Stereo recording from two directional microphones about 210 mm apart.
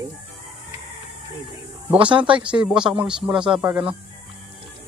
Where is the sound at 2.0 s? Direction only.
25° right (ahead or behind).